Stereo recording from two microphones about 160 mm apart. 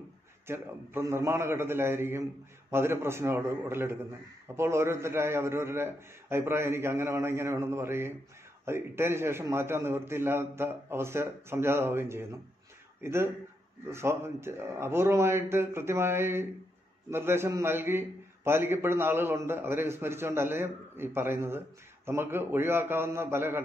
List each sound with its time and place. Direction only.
0.5 s a man's voice: 15° right (ahead or behind)